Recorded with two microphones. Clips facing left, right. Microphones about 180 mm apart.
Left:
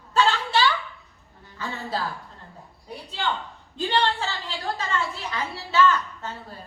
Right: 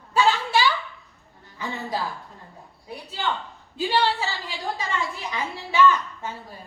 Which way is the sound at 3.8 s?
10° right (ahead or behind).